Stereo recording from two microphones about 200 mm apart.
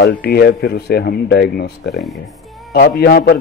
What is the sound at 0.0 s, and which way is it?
A man's voice, 55° left (ahead or behind).